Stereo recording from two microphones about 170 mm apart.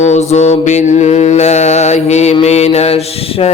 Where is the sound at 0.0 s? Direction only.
40° left (ahead or behind).